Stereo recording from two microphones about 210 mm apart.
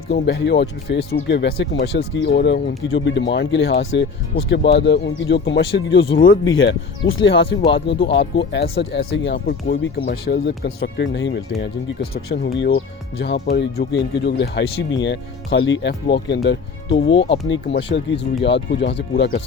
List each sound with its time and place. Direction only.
0.1 s speech: 55° left (ahead or behind)
12.5 s speech: 60° left (ahead or behind)
17.1 s speech: 25° left (ahead or behind)
18.4 s speech: 55° left (ahead or behind)